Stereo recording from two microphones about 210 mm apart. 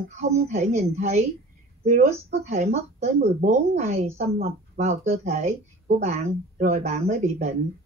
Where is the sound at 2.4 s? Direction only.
30° right (ahead or behind).